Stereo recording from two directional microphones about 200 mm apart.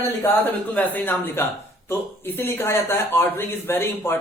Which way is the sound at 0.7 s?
10° left (ahead or behind).